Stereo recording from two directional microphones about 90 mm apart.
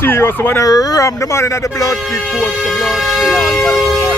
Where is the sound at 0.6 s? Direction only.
40° left (ahead or behind).